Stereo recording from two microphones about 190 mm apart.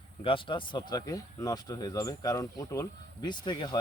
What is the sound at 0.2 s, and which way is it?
Speech, 25° left (ahead or behind).